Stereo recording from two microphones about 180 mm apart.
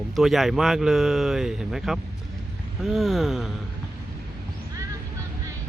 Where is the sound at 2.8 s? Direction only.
Centre (ahead or behind).